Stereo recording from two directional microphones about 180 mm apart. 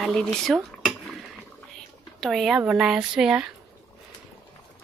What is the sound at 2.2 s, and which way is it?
Speech, centre (ahead or behind).